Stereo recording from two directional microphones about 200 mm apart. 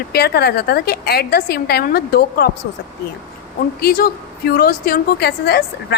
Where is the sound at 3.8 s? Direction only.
50° left (ahead or behind).